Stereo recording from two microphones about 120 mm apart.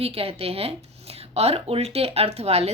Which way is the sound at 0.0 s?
55° right (ahead or behind).